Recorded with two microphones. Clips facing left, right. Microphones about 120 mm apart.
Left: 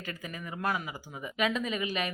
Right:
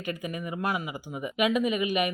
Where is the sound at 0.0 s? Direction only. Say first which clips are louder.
Right 7 dB; 15° right (ahead or behind).